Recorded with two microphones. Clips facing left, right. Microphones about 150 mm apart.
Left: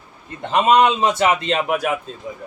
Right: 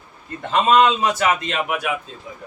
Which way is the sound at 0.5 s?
20° left (ahead or behind).